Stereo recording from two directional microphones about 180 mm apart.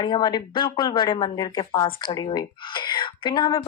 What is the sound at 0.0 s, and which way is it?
Speech, 25° left (ahead or behind).